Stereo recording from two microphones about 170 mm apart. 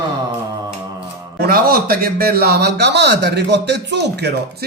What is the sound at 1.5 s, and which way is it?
A man's voice, 60° right (ahead or behind).